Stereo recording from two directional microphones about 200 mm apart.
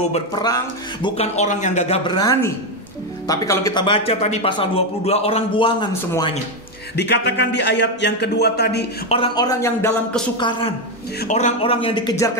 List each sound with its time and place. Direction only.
0.0 s speech: 35° left (ahead or behind)
2.1 s speech: 15° left (ahead or behind)
7.0 s speech: 60° left (ahead or behind)
9.1 s speech: 25° left (ahead or behind)
10.3 s speech: 25° left (ahead or behind)
11.2 s speech: 35° left (ahead or behind)